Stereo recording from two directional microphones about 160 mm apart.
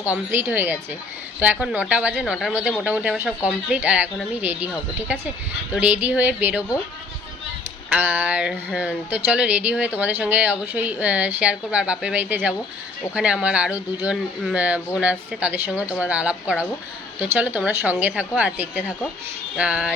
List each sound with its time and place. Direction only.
0.0 s speech: 10° right (ahead or behind)
7.9 s speech: 10° right (ahead or behind)